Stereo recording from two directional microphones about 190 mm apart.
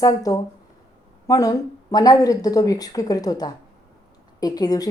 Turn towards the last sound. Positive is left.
turn(degrees=20)  # may be behind; listen again after turning